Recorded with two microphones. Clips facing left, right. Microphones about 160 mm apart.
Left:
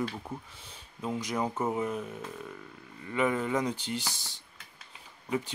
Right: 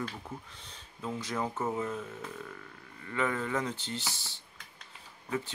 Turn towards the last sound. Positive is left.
turn(degrees=15)  # may be behind; listen again after turning